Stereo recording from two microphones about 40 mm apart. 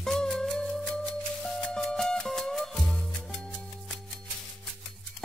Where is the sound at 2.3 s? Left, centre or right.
Centre.